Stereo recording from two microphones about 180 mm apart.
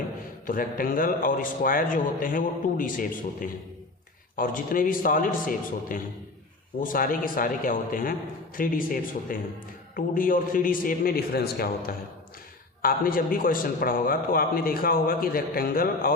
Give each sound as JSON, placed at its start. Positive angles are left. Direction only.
{"t": 0.4, "sound": "a man's voice", "side_deg": 50}